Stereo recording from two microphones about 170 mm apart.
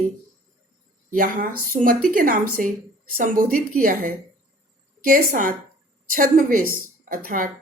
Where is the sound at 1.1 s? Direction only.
55° right (ahead or behind).